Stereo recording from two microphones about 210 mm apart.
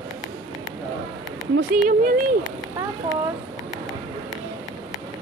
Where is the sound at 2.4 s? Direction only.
20° right (ahead or behind).